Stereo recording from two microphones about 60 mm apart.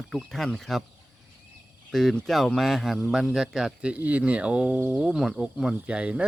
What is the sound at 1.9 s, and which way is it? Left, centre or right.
Speech, centre.